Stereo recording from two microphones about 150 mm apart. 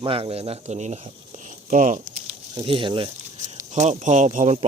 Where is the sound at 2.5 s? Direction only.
30° right (ahead or behind).